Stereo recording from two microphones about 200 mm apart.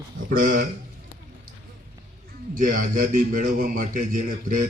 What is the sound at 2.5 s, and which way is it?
A man's voice, 45° right (ahead or behind).